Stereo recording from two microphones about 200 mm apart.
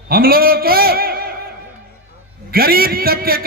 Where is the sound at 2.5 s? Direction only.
50° right (ahead or behind).